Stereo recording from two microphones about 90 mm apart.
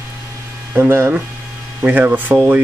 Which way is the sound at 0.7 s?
25° right (ahead or behind).